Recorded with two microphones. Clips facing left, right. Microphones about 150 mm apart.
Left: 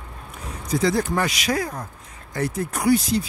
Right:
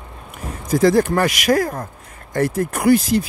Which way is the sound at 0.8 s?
50° right (ahead or behind).